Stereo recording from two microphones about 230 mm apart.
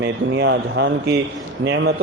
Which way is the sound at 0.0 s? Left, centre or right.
Right.